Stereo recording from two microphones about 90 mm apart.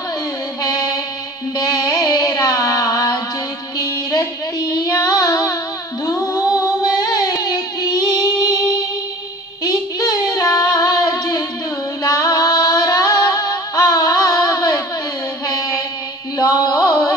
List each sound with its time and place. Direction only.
0.6 s music: 45° left (ahead or behind)
1.6 s carnatic music: 45° left (ahead or behind)
3.7 s child singing: 40° left (ahead or behind)
6.0 s music: 40° left (ahead or behind)
9.7 s child singing: 40° left (ahead or behind)
12.0 s music: 40° left (ahead or behind)
16.3 s a sound: 50° left (ahead or behind)